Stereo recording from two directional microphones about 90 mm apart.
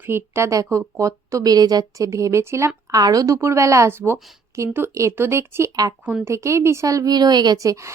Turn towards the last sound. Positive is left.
turn(degrees=-35)  # may be behind; listen again after turning